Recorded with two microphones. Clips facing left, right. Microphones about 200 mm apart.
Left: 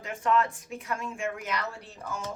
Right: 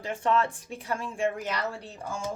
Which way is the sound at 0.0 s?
30° right (ahead or behind).